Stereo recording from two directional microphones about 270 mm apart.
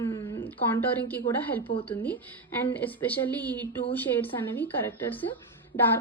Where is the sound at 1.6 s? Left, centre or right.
Centre.